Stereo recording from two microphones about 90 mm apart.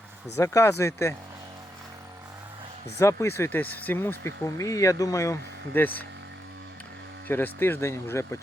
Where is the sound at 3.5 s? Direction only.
20° left (ahead or behind); by 5.3 s 40° left (ahead or behind).